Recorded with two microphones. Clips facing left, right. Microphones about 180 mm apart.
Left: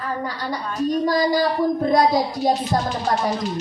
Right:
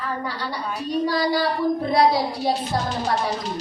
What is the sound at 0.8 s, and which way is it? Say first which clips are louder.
A woman's voice: left 4 dB; 45° left (ahead or behind).